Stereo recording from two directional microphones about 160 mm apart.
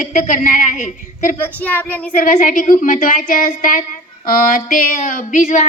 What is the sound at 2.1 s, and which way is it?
Speech, 55° left (ahead or behind).